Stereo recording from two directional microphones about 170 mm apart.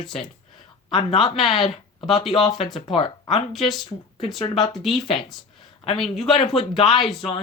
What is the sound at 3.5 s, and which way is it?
Speech, centre (ahead or behind).